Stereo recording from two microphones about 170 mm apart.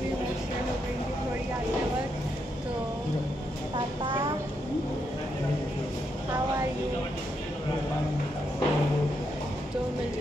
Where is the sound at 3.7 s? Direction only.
25° right (ahead or behind).